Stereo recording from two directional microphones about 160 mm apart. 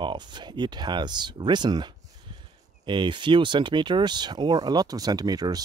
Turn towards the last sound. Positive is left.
turn(degrees=-25)  # may be behind; listen again after turning